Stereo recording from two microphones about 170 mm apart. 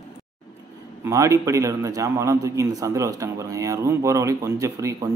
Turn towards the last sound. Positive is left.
turn(degrees=-20)  # may be behind; listen again after turning